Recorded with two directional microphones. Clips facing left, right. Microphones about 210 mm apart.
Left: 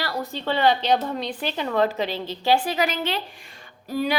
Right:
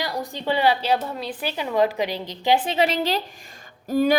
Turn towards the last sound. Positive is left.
turn(degrees=-45)  # may be behind; listen again after turning